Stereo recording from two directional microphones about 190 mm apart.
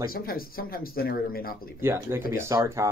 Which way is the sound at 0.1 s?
50° left (ahead or behind).